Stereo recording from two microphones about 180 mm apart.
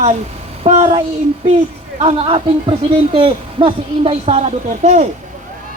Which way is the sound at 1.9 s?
30° right (ahead or behind).